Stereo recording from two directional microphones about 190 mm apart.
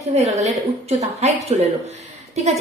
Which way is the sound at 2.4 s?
35° right (ahead or behind).